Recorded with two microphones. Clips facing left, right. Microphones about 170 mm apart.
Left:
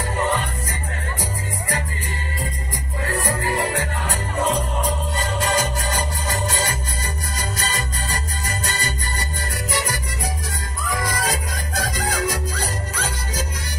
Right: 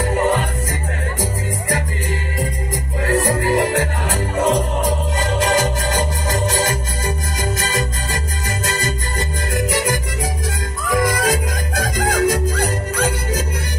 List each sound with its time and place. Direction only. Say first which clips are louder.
0.0 s music: right 5 dB; 45° right (ahead or behind)
3.0 s music: right 6 dB; 40° right (ahead or behind)
11.0 s music: right 8 dB; 50° right (ahead or behind)